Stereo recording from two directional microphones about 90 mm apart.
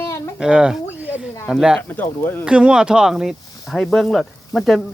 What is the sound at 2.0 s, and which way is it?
Speech, 20° left (ahead or behind).